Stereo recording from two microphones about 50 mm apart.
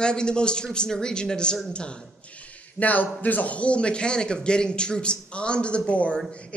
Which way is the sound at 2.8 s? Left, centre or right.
Left.